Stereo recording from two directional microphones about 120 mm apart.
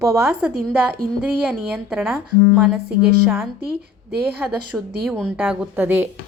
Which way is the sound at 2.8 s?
20° right (ahead or behind).